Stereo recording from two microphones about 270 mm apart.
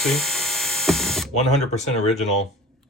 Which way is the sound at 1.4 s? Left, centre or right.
Left.